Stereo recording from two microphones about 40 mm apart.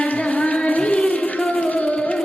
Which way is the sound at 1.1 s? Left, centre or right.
Left.